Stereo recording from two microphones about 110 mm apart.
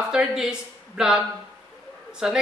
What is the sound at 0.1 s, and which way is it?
Speech, 5° right (ahead or behind).